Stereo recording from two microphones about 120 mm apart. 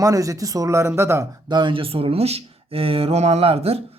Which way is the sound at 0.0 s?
30° right (ahead or behind).